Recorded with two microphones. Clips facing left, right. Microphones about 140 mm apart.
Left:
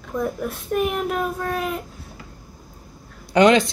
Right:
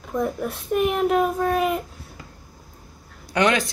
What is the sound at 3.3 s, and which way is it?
Speech, 25° left (ahead or behind).